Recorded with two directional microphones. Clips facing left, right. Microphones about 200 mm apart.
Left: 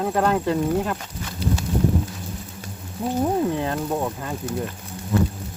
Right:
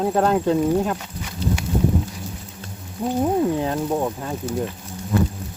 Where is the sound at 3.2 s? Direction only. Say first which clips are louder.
Right 2 dB; 5° right (ahead or behind).